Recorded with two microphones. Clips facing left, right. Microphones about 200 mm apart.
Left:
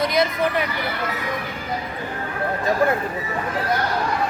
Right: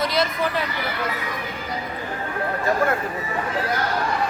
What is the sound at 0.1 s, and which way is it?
Speech, 15° left (ahead or behind).